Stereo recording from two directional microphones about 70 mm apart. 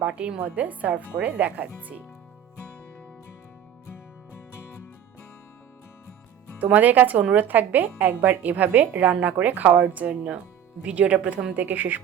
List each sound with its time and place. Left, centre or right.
0.0 s speech: centre
6.6 s speech: right